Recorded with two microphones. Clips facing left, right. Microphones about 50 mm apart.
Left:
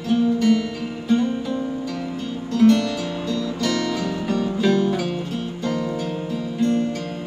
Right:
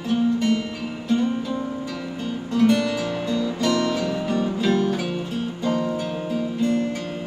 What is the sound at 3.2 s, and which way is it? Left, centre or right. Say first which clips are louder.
Guitar: even; right.